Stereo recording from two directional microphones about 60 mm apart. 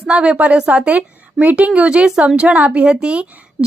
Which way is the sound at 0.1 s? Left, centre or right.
Centre.